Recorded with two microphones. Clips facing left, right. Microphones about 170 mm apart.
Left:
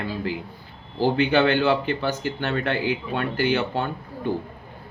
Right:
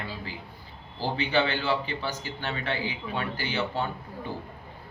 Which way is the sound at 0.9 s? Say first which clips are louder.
Left 7 dB; 60° left (ahead or behind).